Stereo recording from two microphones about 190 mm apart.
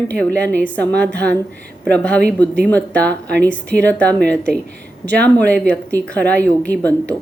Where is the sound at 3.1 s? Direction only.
60° right (ahead or behind).